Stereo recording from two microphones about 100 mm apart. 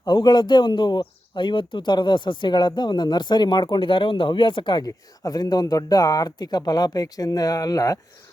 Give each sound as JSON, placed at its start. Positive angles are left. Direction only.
{"t": 0.0, "sound": "speech", "side_deg": 45}